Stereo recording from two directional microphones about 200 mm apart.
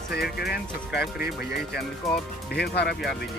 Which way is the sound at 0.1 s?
55° left (ahead or behind).